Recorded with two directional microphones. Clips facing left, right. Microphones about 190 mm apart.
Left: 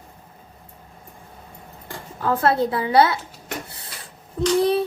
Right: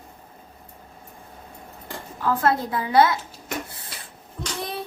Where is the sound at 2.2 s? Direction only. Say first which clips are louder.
Left 3 dB; 30° left (ahead or behind).